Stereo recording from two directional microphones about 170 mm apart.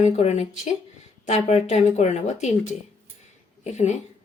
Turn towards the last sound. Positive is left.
turn(degrees=45)  # may be behind; listen again after turning